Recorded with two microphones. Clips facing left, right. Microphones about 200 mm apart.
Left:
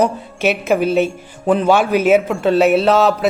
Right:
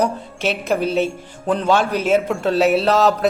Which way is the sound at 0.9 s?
55° left (ahead or behind).